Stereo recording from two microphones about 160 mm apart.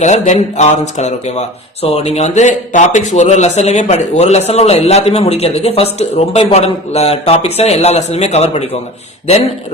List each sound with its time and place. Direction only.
0.0 s speech: 45° left (ahead or behind)